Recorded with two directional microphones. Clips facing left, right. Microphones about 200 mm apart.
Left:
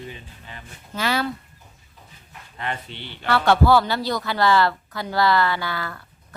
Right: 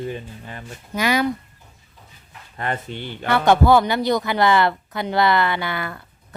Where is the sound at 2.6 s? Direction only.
45° right (ahead or behind).